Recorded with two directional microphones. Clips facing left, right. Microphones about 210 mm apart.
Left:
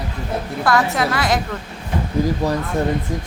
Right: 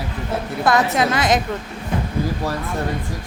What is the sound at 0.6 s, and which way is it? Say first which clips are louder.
Speech: right 1 dB; 20° right (ahead or behind).